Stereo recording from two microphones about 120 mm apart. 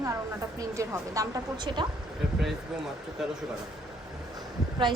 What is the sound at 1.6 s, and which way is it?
Speech, 40° right (ahead or behind).